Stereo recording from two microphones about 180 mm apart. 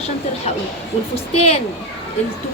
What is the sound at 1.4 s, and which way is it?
Speech, 40° left (ahead or behind).